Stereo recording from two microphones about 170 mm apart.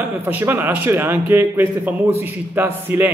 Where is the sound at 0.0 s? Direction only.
10° right (ahead or behind).